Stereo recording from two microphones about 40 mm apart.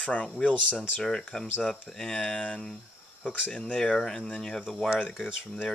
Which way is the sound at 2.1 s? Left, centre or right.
Left.